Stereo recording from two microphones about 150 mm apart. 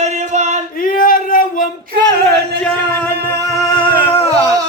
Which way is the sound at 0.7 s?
70° left (ahead or behind).